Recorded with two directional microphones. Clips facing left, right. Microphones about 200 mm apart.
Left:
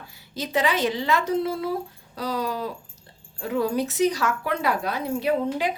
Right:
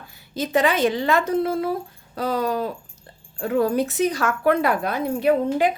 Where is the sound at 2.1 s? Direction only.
55° right (ahead or behind).